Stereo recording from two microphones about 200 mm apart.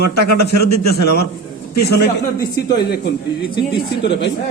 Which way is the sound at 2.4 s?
50° left (ahead or behind).